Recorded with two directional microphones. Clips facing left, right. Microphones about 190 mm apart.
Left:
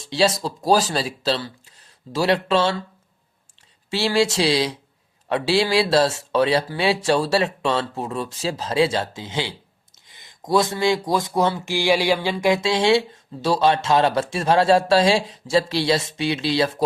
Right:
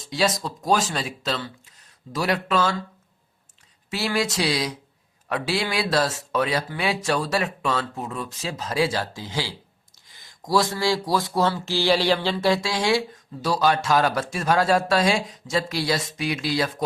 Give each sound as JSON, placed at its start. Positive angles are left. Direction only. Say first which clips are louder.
{"t": 0.0, "sound": "speech", "louder": "left 4 dB", "side_deg": 30}
{"t": 3.8, "sound": "speech", "louder": "left 5 dB", "side_deg": 30}